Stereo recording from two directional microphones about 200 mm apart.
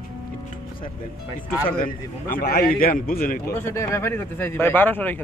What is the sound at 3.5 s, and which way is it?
Speech, 15° left (ahead or behind).